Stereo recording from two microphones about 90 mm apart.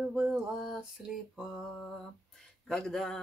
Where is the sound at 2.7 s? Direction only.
5° left (ahead or behind).